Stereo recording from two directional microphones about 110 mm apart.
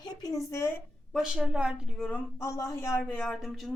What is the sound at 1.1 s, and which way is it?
Speech, 5° right (ahead or behind).